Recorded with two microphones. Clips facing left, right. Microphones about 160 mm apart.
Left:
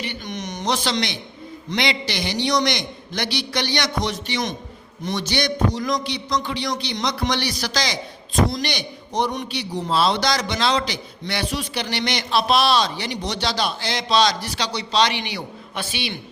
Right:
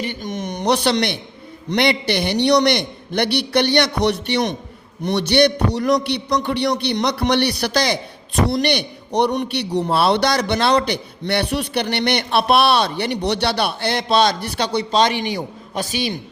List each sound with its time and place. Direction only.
0.0 s a man's voice: 45° right (ahead or behind)